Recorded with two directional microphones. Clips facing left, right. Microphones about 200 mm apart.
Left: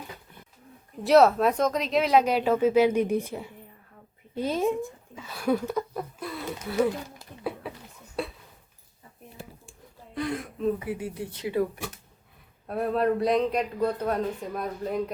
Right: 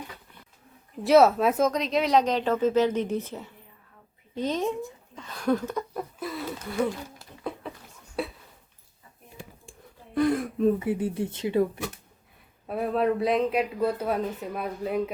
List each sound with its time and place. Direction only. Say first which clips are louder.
1.0 s speech: even; centre (ahead or behind)
8.2 s a sound: right 1 dB; centre (ahead or behind)
10.2 s speech: right 7 dB; 45° right (ahead or behind)
10.8 s speech: right 5 dB; 25° right (ahead or behind)
12.6 s a man's voice: even; centre (ahead or behind)